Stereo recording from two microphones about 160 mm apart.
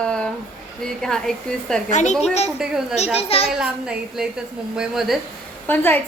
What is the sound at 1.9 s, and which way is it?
Speech, 50° left (ahead or behind).